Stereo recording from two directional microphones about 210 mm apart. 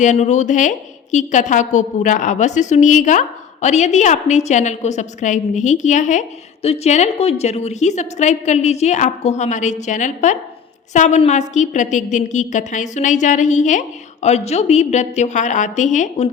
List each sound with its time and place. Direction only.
0.0 s a woman's voice: 35° left (ahead or behind)